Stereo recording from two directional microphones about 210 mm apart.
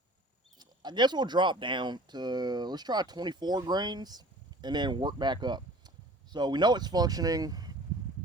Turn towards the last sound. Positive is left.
turn(degrees=-20)  # may be behind; listen again after turning